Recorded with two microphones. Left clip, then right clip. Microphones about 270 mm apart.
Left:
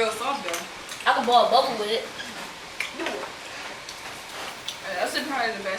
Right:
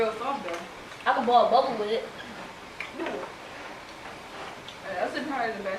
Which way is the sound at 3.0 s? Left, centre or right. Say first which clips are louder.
Left 1 dB; centre.